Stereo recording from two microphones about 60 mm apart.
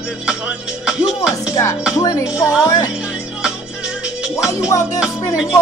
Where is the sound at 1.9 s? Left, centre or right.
Left.